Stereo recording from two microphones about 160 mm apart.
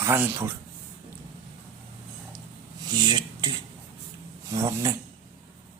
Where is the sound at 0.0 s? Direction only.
15° right (ahead or behind).